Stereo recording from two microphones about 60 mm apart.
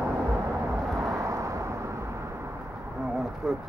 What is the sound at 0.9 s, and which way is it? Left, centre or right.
Vehicle, right.